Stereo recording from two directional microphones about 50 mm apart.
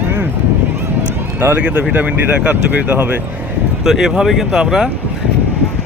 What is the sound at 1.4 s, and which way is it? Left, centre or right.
Speech, right.